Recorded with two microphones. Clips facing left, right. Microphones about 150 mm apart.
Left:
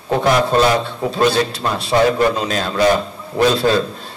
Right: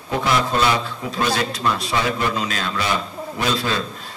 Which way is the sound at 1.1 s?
30° left (ahead or behind).